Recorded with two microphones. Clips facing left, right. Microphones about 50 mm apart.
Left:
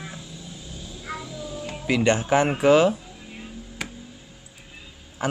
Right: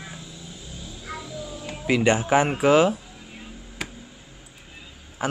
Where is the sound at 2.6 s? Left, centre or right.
Centre.